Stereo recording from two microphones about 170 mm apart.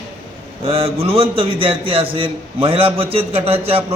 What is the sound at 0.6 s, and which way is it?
A man's voice, 35° right (ahead or behind).